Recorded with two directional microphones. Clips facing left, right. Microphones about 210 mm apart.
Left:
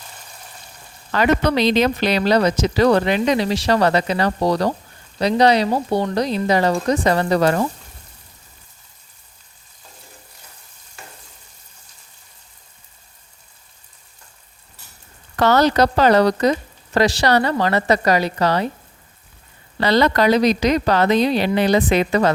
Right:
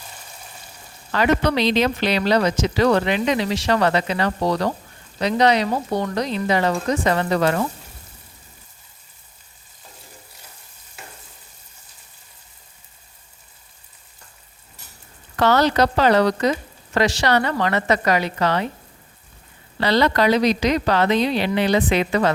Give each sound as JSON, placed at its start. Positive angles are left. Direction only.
{"t": 1.1, "sound": "speech", "side_deg": 45}
{"t": 15.4, "sound": "speech", "side_deg": 40}
{"t": 19.8, "sound": "speech", "side_deg": 45}